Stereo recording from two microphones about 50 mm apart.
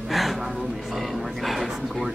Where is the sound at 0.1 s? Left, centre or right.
Centre.